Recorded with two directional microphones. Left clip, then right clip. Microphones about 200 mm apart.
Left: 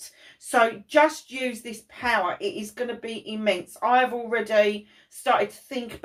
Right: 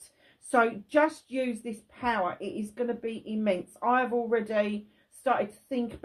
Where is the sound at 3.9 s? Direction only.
40° right (ahead or behind).